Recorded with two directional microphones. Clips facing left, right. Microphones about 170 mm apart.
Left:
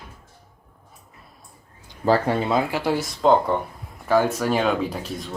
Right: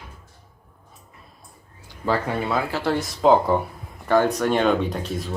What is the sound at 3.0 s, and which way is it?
Speech, centre (ahead or behind).